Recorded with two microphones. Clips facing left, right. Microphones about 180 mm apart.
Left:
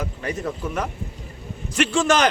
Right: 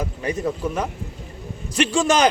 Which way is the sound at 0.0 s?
15° right (ahead or behind).